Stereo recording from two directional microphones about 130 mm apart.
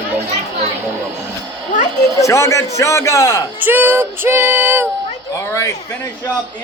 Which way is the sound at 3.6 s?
15° right (ahead or behind).